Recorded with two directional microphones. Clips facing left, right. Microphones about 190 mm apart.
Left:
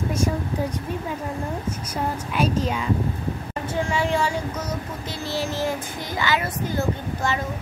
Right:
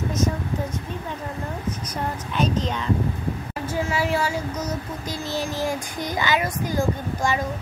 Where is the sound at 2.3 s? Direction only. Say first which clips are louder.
Even; 10° left (ahead or behind).